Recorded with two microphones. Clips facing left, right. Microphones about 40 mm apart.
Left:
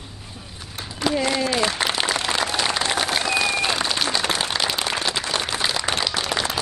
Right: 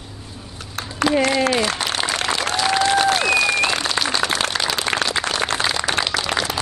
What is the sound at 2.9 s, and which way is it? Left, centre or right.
Applause, right.